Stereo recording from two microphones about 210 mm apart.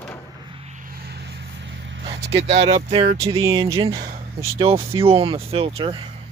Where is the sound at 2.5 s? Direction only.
30° right (ahead or behind).